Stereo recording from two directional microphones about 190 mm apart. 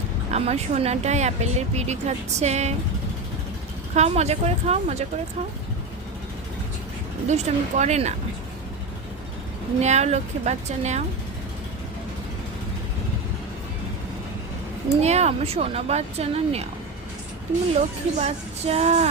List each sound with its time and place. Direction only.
0.3 s speech: 35° right (ahead or behind)
3.9 s speech: 35° right (ahead or behind)
7.3 s speech: 40° right (ahead or behind)
9.8 s speech: 35° right (ahead or behind)
15.0 s speech: 35° right (ahead or behind)
17.7 s speech: 35° right (ahead or behind)